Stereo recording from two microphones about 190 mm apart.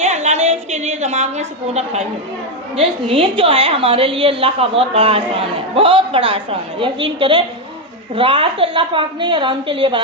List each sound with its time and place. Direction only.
0.0 s a woman's voice: 35° right (ahead or behind)